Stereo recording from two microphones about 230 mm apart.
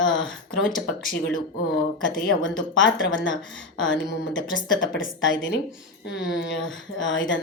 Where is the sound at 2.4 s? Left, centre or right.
Left.